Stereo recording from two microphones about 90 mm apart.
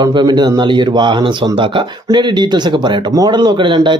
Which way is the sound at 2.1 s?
55° right (ahead or behind).